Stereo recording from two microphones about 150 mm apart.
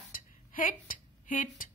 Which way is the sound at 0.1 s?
65° left (ahead or behind).